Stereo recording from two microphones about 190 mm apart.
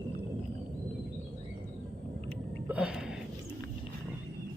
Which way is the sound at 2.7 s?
5° right (ahead or behind).